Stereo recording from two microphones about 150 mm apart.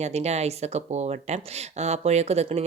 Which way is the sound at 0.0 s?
45° right (ahead or behind).